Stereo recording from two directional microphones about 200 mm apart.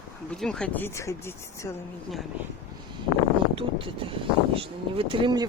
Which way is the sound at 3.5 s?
25° right (ahead or behind).